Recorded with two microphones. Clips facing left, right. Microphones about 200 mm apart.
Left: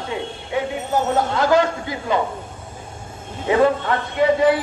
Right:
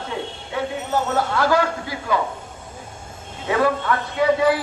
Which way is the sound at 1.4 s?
20° left (ahead or behind).